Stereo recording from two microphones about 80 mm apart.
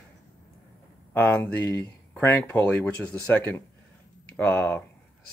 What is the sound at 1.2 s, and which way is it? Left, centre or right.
Speech, centre.